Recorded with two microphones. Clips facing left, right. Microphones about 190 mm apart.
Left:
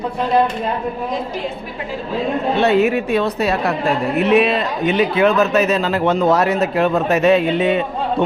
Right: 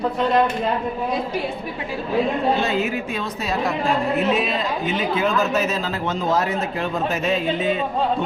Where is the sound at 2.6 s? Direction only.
65° left (ahead or behind).